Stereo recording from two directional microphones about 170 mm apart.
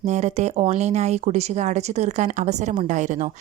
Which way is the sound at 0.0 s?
40° right (ahead or behind).